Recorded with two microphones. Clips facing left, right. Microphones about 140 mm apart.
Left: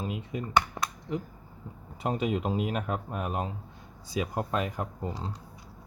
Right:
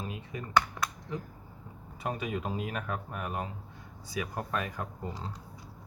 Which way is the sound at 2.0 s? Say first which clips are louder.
Left 5 dB; 25° left (ahead or behind).